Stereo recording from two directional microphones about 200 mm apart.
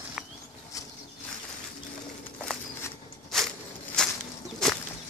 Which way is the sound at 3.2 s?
Centre (ahead or behind).